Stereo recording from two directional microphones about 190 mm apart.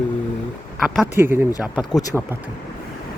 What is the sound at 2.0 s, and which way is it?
Speech, 20° left (ahead or behind).